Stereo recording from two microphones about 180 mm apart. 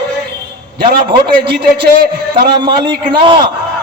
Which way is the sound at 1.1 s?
30° right (ahead or behind).